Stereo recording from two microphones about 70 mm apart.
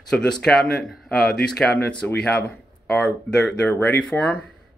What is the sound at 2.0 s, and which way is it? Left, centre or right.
Speech, left.